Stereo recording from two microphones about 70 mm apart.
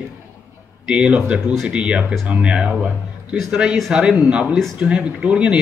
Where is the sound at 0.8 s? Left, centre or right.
Centre.